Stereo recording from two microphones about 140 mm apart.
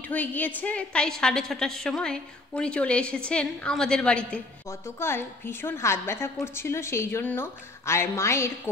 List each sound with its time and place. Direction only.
0.0 s a woman's voice: 10° left (ahead or behind)
4.6 s a woman's voice: 20° left (ahead or behind)